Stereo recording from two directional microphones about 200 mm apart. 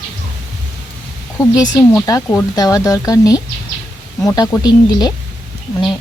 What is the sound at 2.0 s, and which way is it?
Speech, 15° left (ahead or behind).